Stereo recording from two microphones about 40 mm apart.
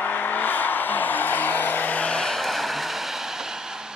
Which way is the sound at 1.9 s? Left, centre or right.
Left.